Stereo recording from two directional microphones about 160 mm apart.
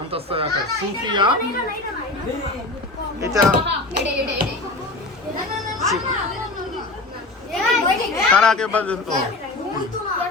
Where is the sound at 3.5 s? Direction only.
65° right (ahead or behind).